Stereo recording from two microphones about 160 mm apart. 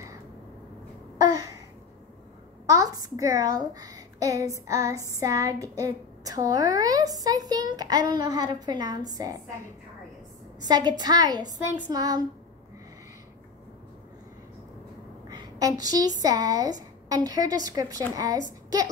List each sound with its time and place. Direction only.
1.1 s babbling: 25° right (ahead or behind)
2.6 s a child's voice: 20° right (ahead or behind)
10.6 s a child's voice: 25° right (ahead or behind)
15.2 s a child's voice: 25° right (ahead or behind)